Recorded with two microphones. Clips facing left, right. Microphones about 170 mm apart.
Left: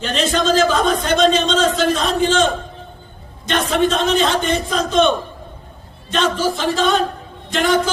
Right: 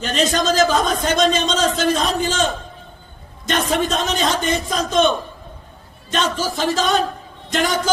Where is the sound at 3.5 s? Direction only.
40° right (ahead or behind).